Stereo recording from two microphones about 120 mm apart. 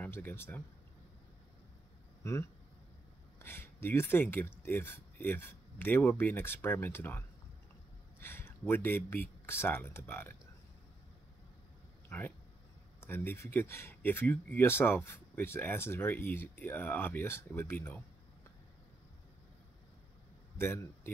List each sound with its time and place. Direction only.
0.0 s speech: 15° left (ahead or behind)
2.2 s speech: 25° left (ahead or behind)
12.1 s speech: 15° left (ahead or behind)
20.5 s a man's voice: 20° left (ahead or behind)